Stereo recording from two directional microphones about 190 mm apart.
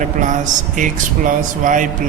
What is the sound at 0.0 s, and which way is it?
A man's voice, 40° right (ahead or behind).